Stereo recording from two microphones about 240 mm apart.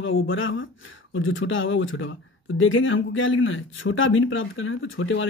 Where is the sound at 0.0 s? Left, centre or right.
Left.